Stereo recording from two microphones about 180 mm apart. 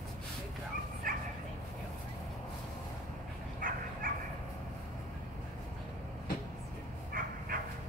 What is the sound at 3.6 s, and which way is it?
Bow-wow, 50° right (ahead or behind).